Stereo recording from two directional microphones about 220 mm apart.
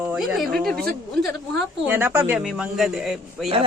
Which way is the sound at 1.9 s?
10° right (ahead or behind).